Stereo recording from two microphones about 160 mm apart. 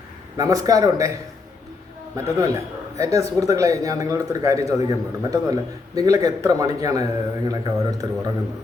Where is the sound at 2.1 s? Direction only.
20° right (ahead or behind).